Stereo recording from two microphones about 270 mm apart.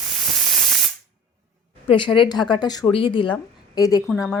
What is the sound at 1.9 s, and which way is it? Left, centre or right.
A woman's voice, centre.